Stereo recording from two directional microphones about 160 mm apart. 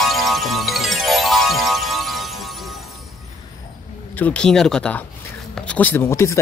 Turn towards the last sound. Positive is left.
turn(degrees=15)  # may be behind; listen again after turning